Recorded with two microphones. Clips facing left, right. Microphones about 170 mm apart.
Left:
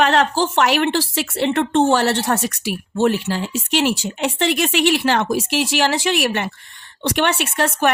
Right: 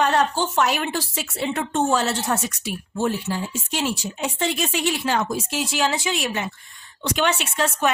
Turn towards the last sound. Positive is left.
turn(degrees=65)  # may be behind; listen again after turning